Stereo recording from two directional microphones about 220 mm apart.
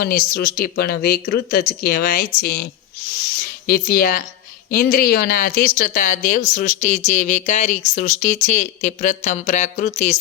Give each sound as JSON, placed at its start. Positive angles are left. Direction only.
{"t": 0.0, "sound": "speech", "side_deg": 45}
{"t": 3.7, "sound": "speech", "side_deg": 45}